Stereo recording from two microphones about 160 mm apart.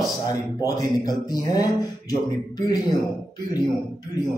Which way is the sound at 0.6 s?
25° left (ahead or behind).